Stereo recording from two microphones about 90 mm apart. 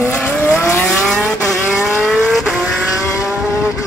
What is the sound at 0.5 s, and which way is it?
Vehicle, 25° left (ahead or behind).